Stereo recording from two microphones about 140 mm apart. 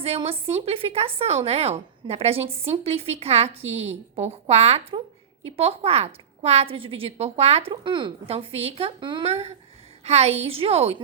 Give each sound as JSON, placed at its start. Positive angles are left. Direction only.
{"t": 0.0, "sound": "a woman's voice", "side_deg": -45}
{"t": 9.2, "sound": "a woman's voice", "side_deg": -50}